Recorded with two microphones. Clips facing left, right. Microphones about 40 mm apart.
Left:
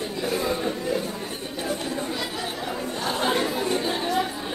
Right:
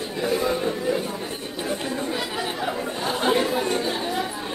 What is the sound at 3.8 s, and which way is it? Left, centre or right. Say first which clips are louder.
Chatter: left 1 dB; centre.